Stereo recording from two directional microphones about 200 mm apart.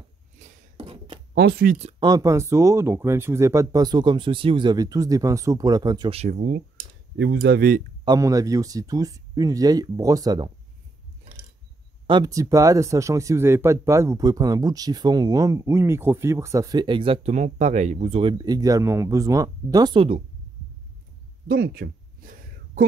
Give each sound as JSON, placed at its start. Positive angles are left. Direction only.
{"t": 0.4, "sound": "a sound", "side_deg": -30}
{"t": 1.3, "sound": "speech", "side_deg": -50}
{"t": 1.8, "sound": "speech", "side_deg": -30}
{"t": 2.0, "sound": "speech", "side_deg": -15}
{"t": 6.1, "sound": "speech", "side_deg": -35}
{"t": 7.3, "sound": "speech", "side_deg": -50}
{"t": 8.0, "sound": "speech", "side_deg": -20}
{"t": 12.1, "sound": "speech", "side_deg": -20}
{"t": 21.5, "sound": "a sound", "side_deg": -50}